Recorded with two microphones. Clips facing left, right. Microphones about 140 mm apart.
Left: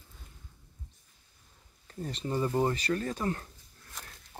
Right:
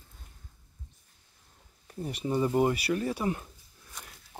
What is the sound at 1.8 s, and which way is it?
Speech, 10° right (ahead or behind).